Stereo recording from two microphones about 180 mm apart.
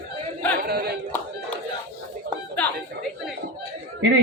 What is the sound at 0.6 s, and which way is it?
Speech, 60° right (ahead or behind).